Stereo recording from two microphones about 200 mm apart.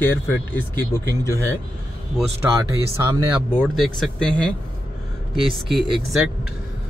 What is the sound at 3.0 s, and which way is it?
Speech, 10° right (ahead or behind).